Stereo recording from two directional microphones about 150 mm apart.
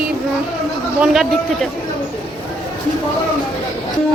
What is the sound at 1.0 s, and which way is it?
Speech, centre (ahead or behind).